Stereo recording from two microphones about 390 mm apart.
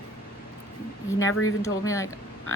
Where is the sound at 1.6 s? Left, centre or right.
Centre.